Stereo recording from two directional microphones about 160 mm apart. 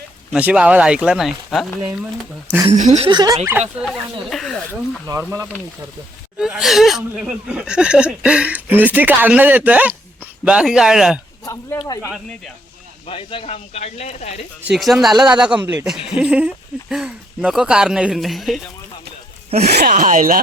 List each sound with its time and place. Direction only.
0.3 s speech: 10° right (ahead or behind)
2.7 s speech: 45° right (ahead or behind)
3.1 s speech: 25° right (ahead or behind)
3.8 s speech: centre (ahead or behind)
4.7 s speech: 20° right (ahead or behind)
6.4 s speech: centre (ahead or behind)
13.1 s speech: 35° left (ahead or behind)
14.7 s speech: centre (ahead or behind)
19.5 s speech: 85° right
19.9 s speech: 55° right (ahead or behind)